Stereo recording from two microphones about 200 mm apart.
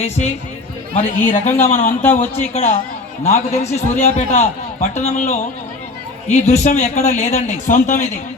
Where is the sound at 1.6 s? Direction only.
40° left (ahead or behind).